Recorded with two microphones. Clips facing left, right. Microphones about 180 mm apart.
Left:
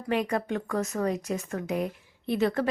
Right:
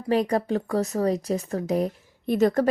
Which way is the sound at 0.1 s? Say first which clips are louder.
Right 5 dB; 35° right (ahead or behind).